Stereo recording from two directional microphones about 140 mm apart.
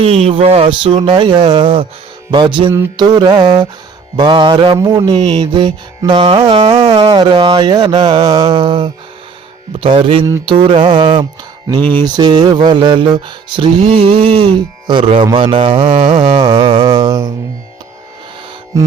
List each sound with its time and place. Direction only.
0.0 s music: 45° right (ahead or behind)
11.8 s music: 15° left (ahead or behind)
12.0 s music: 30° right (ahead or behind)
13.8 s music: 45° right (ahead or behind)